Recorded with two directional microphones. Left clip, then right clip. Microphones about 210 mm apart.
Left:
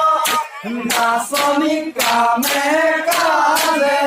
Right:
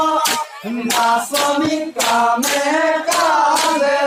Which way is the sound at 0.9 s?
40° left (ahead or behind).